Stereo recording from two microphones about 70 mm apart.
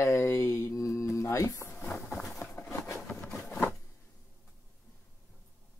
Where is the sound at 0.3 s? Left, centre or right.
Left.